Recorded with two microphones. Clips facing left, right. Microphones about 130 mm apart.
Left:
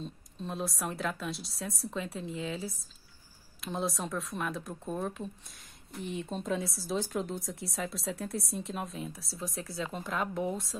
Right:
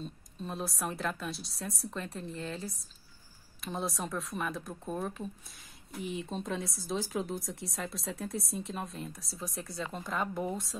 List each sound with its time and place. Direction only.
0.0 s speech: centre (ahead or behind)